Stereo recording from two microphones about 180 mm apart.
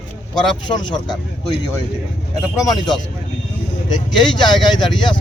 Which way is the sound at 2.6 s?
20° left (ahead or behind).